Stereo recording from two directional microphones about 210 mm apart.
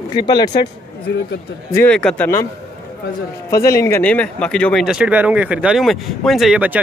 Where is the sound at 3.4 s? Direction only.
15° left (ahead or behind).